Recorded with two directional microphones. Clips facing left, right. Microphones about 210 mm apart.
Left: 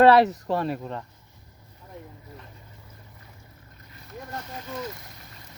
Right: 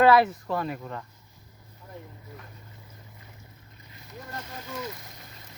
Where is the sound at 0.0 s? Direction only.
35° left (ahead or behind).